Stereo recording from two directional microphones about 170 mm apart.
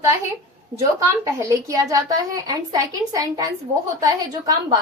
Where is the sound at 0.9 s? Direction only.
20° right (ahead or behind).